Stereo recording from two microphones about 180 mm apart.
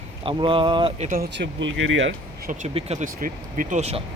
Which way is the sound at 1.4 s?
90° right.